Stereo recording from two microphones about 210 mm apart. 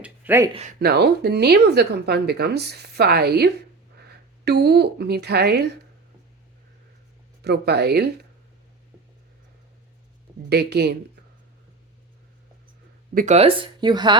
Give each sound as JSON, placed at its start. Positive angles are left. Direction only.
{"t": 0.0, "sound": "speech", "side_deg": -10}
{"t": 0.5, "sound": "speech", "side_deg": -35}
{"t": 0.8, "sound": "speech", "side_deg": -50}
{"t": 7.4, "sound": "speech", "side_deg": -50}
{"t": 10.5, "sound": "speech", "side_deg": -50}
{"t": 13.1, "sound": "speech", "side_deg": -35}